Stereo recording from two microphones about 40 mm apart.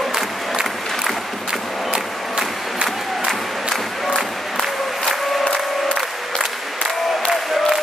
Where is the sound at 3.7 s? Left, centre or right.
Centre.